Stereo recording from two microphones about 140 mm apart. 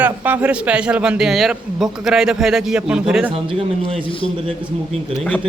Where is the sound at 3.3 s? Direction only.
40° right (ahead or behind).